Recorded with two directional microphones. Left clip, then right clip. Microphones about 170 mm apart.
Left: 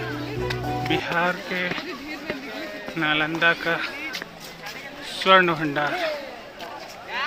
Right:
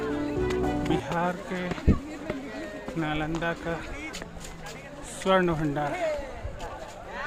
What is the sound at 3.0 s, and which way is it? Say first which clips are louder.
Speech: left 9 dB; 10° right (ahead or behind).